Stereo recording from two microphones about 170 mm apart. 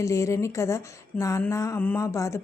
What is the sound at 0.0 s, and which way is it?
A woman's voice, 20° left (ahead or behind).